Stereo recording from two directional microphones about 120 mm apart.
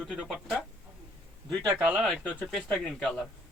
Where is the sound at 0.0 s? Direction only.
Centre (ahead or behind).